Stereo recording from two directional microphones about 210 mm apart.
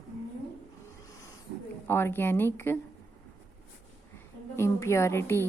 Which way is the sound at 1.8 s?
10° left (ahead or behind).